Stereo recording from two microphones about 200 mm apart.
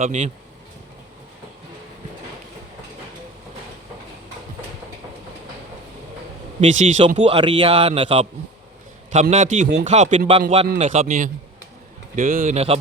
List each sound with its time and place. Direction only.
0.0 s a man's voice: 35° right (ahead or behind)
6.6 s a man's voice: 35° right (ahead or behind)
9.3 s a man's voice: 40° right (ahead or behind)